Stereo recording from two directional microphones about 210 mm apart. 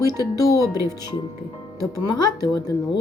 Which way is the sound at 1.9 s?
15° left (ahead or behind).